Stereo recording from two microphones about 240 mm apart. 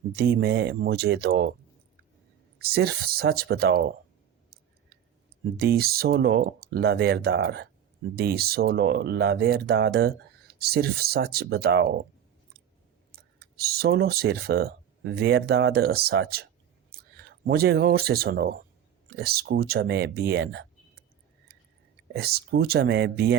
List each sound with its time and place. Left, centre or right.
0.2 s speech: right
2.6 s speech: right
5.5 s speech: right
13.6 s speech: right
22.1 s speech: right